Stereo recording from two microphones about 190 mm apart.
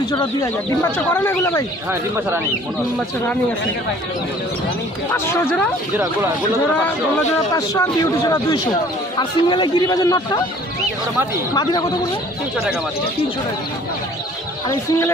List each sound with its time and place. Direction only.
0.1 s speech: 20° left (ahead or behind)
5.1 s speech: 10° left (ahead or behind)
7.5 s a man's voice: 15° left (ahead or behind)
11.5 s a man's voice: 20° left (ahead or behind)